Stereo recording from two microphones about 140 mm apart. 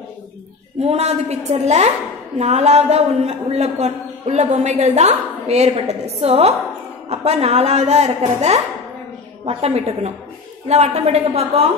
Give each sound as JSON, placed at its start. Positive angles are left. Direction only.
{"t": 0.8, "sound": "a man's voice", "side_deg": -50}